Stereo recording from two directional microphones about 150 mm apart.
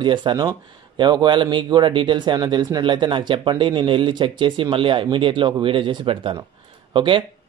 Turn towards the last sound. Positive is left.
turn(degrees=-35)  # may be behind; listen again after turning